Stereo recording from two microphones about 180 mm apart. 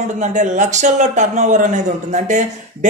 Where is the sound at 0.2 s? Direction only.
40° right (ahead or behind).